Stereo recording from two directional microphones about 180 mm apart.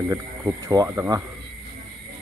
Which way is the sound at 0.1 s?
15° right (ahead or behind).